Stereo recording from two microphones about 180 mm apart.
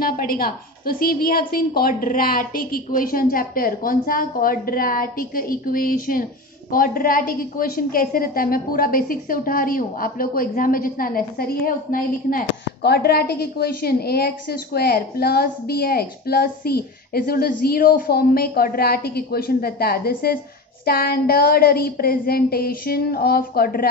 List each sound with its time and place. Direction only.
0.0 s a woman's voice: 55° left (ahead or behind)